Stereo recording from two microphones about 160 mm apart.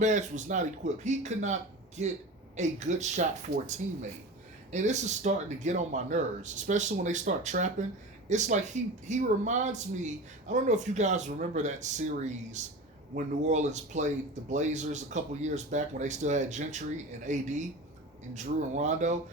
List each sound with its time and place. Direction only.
0.0 s speech: 50° right (ahead or behind)